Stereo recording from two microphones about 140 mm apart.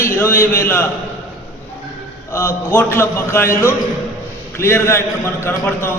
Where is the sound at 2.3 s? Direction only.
20° left (ahead or behind).